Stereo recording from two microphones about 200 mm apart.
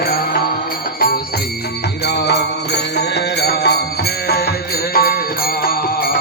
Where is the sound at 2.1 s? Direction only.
55° left (ahead or behind).